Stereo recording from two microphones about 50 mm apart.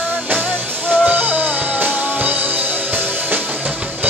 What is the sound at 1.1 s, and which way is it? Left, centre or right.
Music, right.